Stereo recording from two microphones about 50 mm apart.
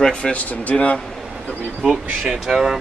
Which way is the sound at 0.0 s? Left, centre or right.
Centre.